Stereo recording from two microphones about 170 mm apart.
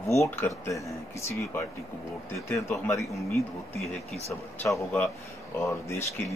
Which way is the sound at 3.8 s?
Centre (ahead or behind).